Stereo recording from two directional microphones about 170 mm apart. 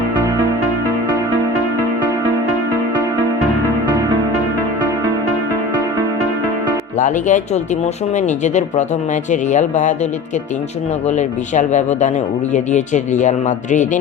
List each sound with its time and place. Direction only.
7.0 s speech: 45° left (ahead or behind)
11.2 s speech: 45° left (ahead or behind)